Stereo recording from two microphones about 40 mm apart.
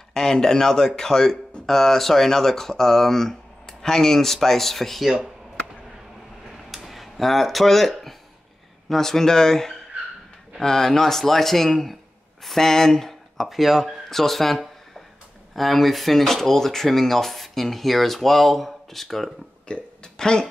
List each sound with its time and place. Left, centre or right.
0.1 s speech: centre
6.5 s a sound: centre
8.8 s speech: centre
13.5 s speech: centre
19.7 s speech: centre